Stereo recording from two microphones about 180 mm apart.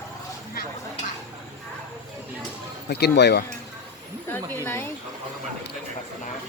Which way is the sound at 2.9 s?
65° left (ahead or behind).